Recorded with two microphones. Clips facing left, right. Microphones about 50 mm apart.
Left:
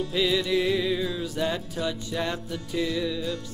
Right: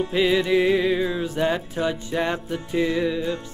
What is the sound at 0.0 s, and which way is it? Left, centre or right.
Music, right.